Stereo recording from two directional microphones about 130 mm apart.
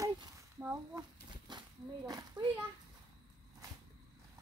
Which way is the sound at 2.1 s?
30° right (ahead or behind).